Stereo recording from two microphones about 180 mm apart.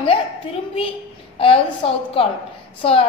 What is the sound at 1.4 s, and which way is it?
A woman's voice, 30° left (ahead or behind).